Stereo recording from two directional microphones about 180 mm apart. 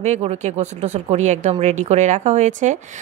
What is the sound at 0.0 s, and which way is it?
Speech, 35° right (ahead or behind).